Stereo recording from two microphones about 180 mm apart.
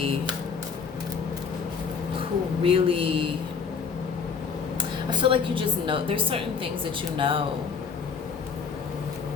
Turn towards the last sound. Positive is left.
turn(degrees=-30)  # may be behind; listen again after turning